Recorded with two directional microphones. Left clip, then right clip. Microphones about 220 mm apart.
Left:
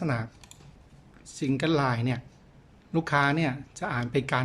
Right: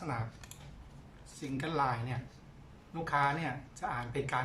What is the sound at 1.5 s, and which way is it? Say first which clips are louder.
Speech: left 6 dB; 45° left (ahead or behind).